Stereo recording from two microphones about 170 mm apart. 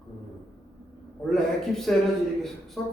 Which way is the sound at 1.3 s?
Centre (ahead or behind).